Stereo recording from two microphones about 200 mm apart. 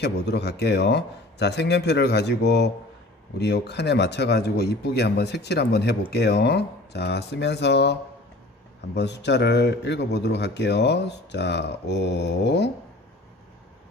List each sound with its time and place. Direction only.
0.0 s speech: 55° left (ahead or behind)
9.0 s speech: 60° left (ahead or behind)